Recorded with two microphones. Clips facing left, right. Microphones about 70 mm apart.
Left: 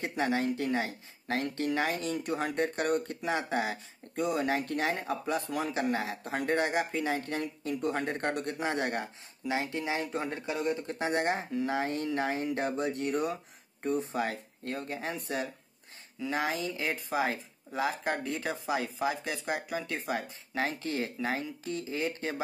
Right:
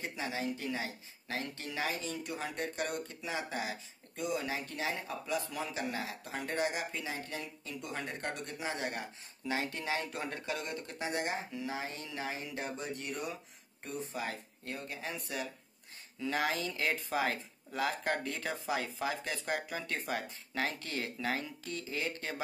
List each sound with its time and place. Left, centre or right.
0.0 s speech: left
2.0 s speech: left
9.5 s speech: centre
11.0 s speech: left
16.2 s speech: left